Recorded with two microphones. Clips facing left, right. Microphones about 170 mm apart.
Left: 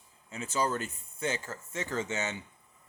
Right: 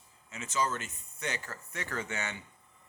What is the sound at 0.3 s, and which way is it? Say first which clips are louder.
Speech: left 2 dB; 30° left (ahead or behind).